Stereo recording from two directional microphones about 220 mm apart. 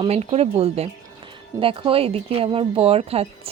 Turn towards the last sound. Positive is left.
turn(degrees=-25)  # may be behind; listen again after turning